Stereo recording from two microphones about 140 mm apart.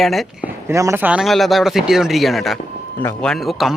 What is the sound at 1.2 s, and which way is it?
Speech, centre (ahead or behind).